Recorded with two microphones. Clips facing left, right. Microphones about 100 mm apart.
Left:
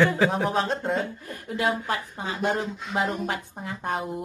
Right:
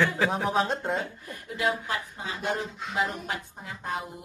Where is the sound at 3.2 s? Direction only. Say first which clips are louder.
Left 4 dB; 50° left (ahead or behind).